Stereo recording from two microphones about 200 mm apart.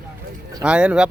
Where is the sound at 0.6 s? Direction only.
5° right (ahead or behind).